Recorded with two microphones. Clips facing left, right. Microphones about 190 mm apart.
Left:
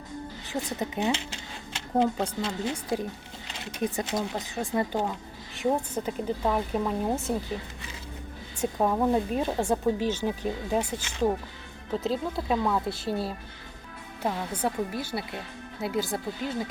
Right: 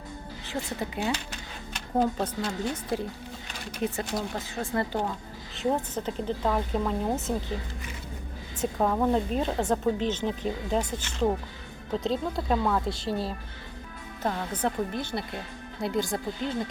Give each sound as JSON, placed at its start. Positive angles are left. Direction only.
{"t": 0.4, "sound": "a sound", "side_deg": 20}
{"t": 2.6, "sound": "speech", "side_deg": 15}
{"t": 8.6, "sound": "speech", "side_deg": 10}